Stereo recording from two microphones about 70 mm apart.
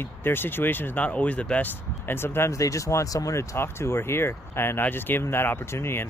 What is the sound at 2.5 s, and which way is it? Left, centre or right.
Speech, left.